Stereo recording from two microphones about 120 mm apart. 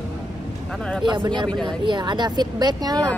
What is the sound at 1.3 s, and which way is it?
A woman's voice, 40° right (ahead or behind).